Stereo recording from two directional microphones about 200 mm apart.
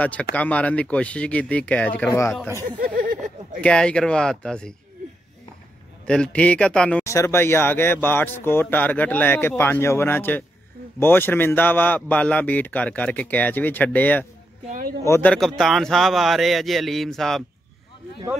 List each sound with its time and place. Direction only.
0.0 s a man's voice: 5° left (ahead or behind)
2.8 s a sound: 45° right (ahead or behind)
3.6 s speech: 5° left (ahead or behind)
6.0 s a man's voice: 5° left (ahead or behind)
14.7 s speech: 40° right (ahead or behind)
15.0 s a man's voice: 10° left (ahead or behind)
15.3 s speech: centre (ahead or behind)